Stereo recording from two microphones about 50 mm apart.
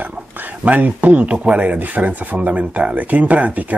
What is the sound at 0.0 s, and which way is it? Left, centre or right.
Speech, right.